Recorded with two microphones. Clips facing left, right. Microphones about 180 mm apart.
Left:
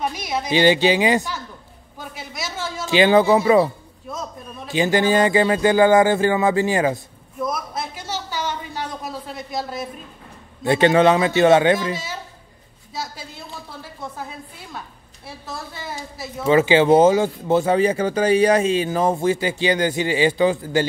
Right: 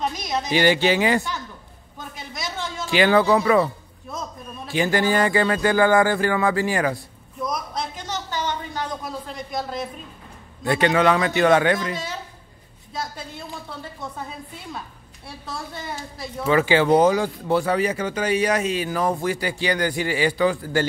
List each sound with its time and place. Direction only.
0.1 s a sound: 10° left (ahead or behind)
0.5 s speech: 20° left (ahead or behind)
2.0 s a sound: 5° left (ahead or behind)
2.8 s speech: 20° left (ahead or behind)
7.4 s a sound: 5° left (ahead or behind)
10.6 s speech: 25° left (ahead or behind)
11.9 s a woman's voice: 5° left (ahead or behind)
15.2 s a woman's voice: centre (ahead or behind)
16.4 s speech: 20° left (ahead or behind)